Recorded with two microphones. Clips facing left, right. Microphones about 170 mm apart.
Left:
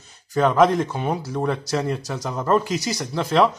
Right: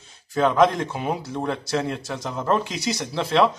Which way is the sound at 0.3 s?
Centre (ahead or behind).